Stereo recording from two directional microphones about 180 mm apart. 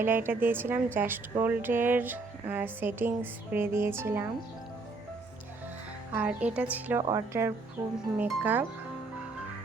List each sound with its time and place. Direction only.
0.0 s a woman's voice: 10° right (ahead or behind)
6.1 s a woman's voice: 5° right (ahead or behind)